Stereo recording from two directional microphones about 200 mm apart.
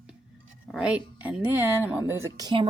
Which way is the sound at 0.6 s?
Centre (ahead or behind).